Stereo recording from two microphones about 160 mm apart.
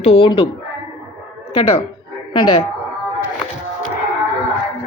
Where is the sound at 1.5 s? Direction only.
35° left (ahead or behind).